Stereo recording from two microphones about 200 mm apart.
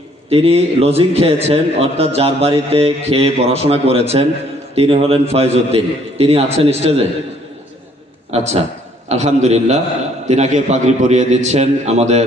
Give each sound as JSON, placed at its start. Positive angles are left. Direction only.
{"t": 0.3, "sound": "a man's voice", "side_deg": -30}
{"t": 8.3, "sound": "a man's voice", "side_deg": -30}